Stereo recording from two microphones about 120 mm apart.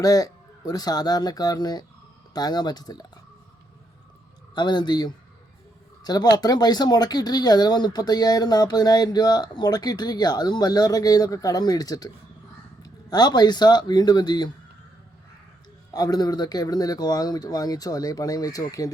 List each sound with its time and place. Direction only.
0.0 s speech: 30° left (ahead or behind)
4.5 s speech: 40° left (ahead or behind)
15.9 s speech: 30° left (ahead or behind)